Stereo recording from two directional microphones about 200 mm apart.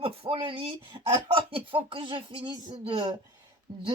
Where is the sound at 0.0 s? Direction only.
25° right (ahead or behind).